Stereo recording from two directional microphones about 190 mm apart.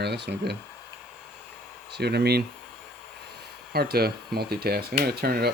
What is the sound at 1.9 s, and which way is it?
Speech, 60° right (ahead or behind).